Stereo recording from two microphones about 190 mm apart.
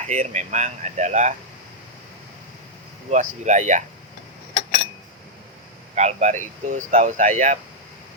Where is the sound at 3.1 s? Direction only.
40° right (ahead or behind).